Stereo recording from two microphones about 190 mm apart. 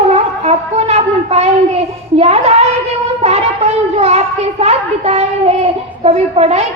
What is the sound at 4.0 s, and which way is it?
A child's voice, 35° right (ahead or behind).